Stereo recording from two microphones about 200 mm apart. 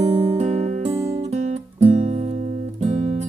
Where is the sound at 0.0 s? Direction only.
35° right (ahead or behind).